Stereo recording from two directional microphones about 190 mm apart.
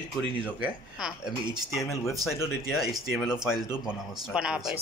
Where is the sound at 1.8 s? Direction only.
15° left (ahead or behind).